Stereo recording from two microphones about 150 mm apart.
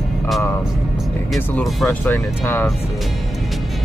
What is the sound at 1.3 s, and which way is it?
Speech, 10° left (ahead or behind).